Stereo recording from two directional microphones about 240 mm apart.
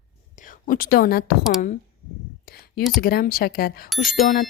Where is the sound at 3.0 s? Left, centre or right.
Left.